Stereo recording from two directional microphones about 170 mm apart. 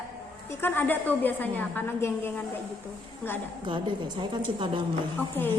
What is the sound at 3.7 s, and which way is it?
A woman's voice, 30° right (ahead or behind).